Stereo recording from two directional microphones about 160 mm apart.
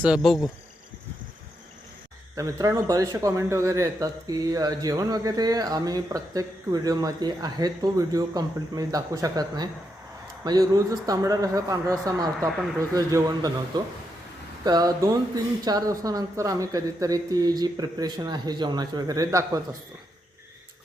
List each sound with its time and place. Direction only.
0.0 s insect: 5° right (ahead or behind)
2.3 s a man's voice: 20° right (ahead or behind)